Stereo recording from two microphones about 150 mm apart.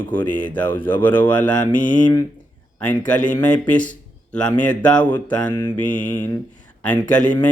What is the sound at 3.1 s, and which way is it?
Speech, 10° left (ahead or behind).